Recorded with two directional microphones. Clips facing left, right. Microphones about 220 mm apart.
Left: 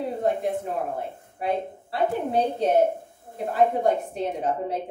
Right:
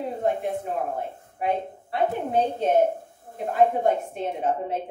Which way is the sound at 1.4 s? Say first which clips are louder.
Even; 35° left (ahead or behind).